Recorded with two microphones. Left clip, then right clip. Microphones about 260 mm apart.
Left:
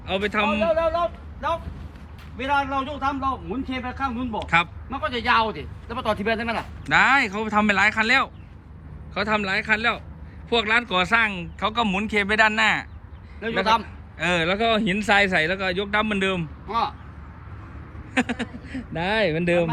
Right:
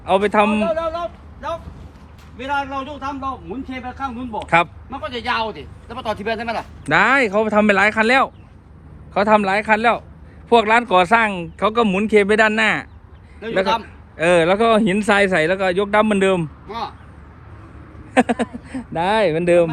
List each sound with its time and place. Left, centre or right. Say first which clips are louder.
0.0 s speech: right 8 dB; centre
0.7 s a sound: even; left
2.4 s a man's voice: even; centre
16.6 s speech: left 3 dB; centre
18.1 s speech: right 8 dB; centre
18.7 s speech: right 6 dB; centre